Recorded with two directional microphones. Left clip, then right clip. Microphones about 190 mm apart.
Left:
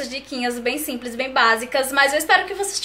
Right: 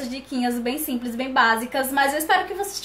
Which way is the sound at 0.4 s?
Centre (ahead or behind).